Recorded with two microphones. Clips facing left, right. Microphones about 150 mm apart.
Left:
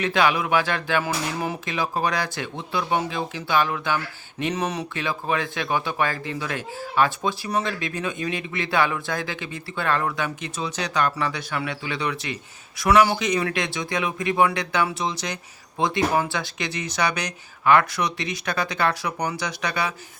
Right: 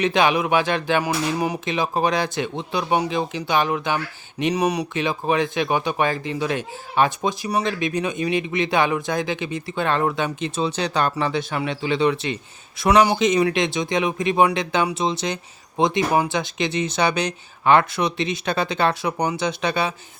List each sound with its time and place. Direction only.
0.0 s speech: 20° right (ahead or behind)